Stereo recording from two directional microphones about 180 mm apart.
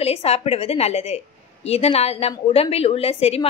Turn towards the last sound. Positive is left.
turn(degrees=35)  # may be behind; listen again after turning